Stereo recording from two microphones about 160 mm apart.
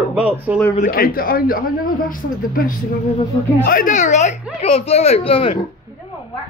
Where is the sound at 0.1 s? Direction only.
10° right (ahead or behind).